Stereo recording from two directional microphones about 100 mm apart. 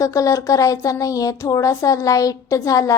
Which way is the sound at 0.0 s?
35° left (ahead or behind).